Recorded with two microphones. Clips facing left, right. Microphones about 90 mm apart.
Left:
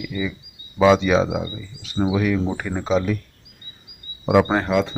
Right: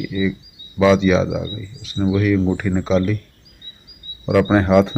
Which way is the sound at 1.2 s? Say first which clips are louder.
Right 2 dB; 25° left (ahead or behind).